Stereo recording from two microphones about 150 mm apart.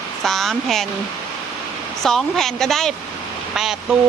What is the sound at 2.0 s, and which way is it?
Speech, centre (ahead or behind).